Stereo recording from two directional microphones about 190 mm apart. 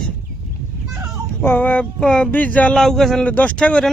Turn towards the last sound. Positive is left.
turn(degrees=5)  # may be behind; listen again after turning